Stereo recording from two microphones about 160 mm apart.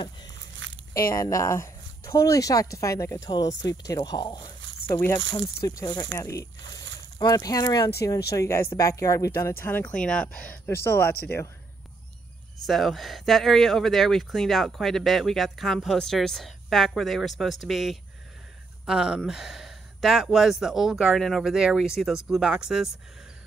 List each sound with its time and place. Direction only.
1.0 s speech: 20° left (ahead or behind)
12.6 s speech: centre (ahead or behind)